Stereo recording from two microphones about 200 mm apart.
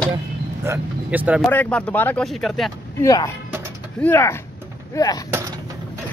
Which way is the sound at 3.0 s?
15° left (ahead or behind).